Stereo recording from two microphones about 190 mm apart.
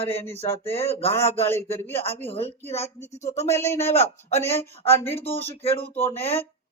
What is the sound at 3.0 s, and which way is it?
Speech, 35° left (ahead or behind).